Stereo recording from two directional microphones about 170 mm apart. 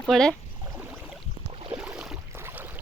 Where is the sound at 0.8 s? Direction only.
10° right (ahead or behind).